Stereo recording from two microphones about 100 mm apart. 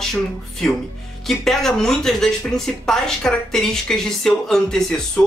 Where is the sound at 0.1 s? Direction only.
5° left (ahead or behind).